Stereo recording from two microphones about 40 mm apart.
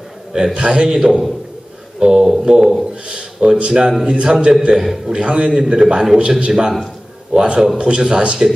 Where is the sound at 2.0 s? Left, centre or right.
Centre.